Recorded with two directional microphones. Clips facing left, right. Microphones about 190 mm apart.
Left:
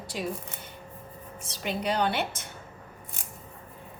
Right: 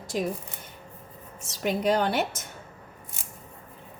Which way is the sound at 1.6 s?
50° right (ahead or behind).